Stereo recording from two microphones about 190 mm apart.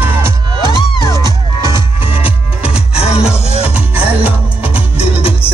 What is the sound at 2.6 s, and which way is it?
Music, 30° left (ahead or behind).